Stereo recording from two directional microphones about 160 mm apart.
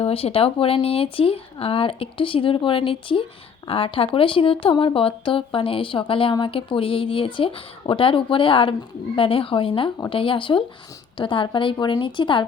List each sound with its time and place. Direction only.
0.0 s speech: 35° left (ahead or behind)